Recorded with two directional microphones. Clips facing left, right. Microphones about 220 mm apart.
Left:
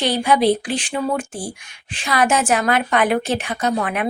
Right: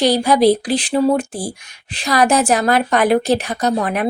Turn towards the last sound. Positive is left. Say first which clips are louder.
# right 3 dB
turn(degrees=-35)  # may be behind; listen again after turning